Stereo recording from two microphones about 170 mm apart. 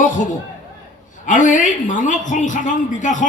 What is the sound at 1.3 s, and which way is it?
A man's voice, 45° left (ahead or behind).